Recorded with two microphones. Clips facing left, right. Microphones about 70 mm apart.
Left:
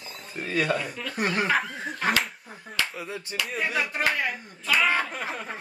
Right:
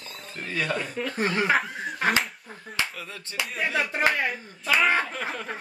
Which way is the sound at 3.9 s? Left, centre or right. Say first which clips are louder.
Right 2 dB; right.